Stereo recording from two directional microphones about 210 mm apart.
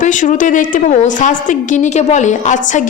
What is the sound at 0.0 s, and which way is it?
A woman's voice, 35° left (ahead or behind).